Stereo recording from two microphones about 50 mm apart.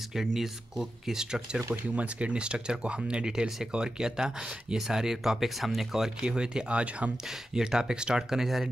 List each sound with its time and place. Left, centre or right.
0.1 s speech: centre
2.0 s speech: right; by 6.3 s centre
6.3 s speech: centre
7.2 s speech: centre